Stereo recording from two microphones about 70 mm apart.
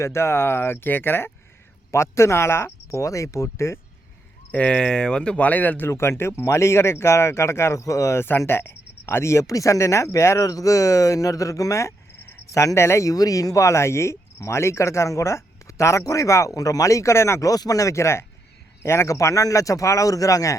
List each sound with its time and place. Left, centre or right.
0.0 s speech: left
1.9 s speech: left
4.5 s speech: centre
5.9 s speech: left
8.2 s speech: left
13.1 s speech: left
17.5 s speech: left